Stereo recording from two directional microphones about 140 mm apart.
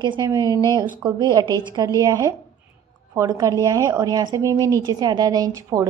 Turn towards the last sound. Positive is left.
turn(degrees=-25)  # may be behind; listen again after turning